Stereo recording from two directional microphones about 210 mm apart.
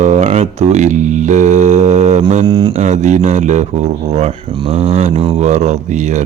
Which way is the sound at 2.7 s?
35° right (ahead or behind).